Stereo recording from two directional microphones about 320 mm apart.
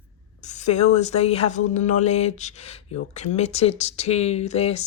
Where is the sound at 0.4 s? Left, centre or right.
Left.